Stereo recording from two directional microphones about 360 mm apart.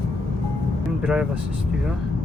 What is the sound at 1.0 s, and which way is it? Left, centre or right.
Speech, centre.